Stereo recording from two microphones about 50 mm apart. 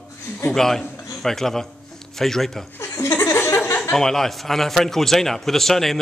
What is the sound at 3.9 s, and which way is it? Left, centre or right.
A man's voice, centre.